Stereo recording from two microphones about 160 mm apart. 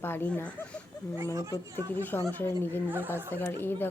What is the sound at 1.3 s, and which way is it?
Speech, 20° right (ahead or behind).